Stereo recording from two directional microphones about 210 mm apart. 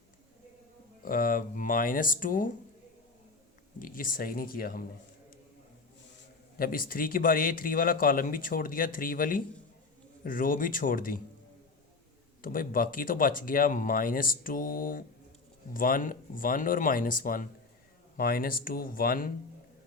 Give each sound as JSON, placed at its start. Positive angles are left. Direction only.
{"t": 1.0, "sound": "speech", "side_deg": 40}
{"t": 3.8, "sound": "speech", "side_deg": 40}
{"t": 6.6, "sound": "speech", "side_deg": 45}
{"t": 12.4, "sound": "speech", "side_deg": 40}